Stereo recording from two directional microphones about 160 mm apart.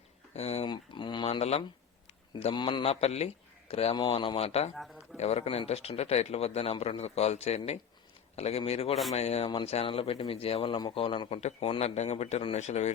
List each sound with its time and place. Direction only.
0.3 s speech: 40° left (ahead or behind)
0.7 s speech: 30° left (ahead or behind)
4.7 s speech: centre (ahead or behind)
5.1 s speech: 40° left (ahead or behind)